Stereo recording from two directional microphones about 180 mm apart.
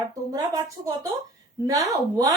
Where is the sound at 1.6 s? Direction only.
20° right (ahead or behind).